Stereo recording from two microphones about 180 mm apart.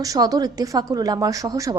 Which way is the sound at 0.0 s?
20° right (ahead or behind).